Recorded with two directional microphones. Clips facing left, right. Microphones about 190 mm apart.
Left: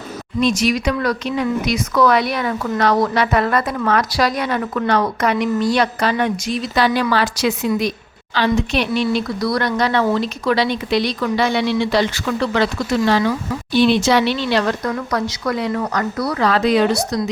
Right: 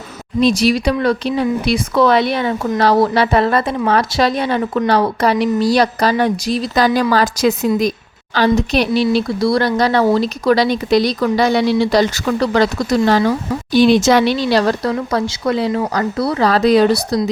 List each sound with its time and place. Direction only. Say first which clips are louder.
0.3 s speech: right 4 dB; 35° right (ahead or behind)